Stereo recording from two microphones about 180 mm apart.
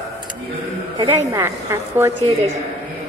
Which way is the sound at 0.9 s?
20° right (ahead or behind).